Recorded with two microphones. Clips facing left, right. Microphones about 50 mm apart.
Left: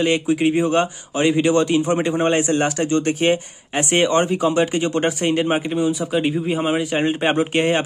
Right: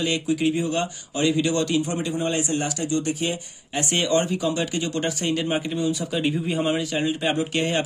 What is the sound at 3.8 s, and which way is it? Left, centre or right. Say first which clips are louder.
Speech: left 5 dB; left.